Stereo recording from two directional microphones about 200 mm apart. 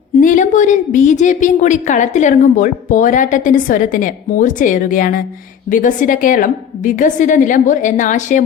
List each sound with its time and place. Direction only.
0.2 s a woman's voice: 40° left (ahead or behind)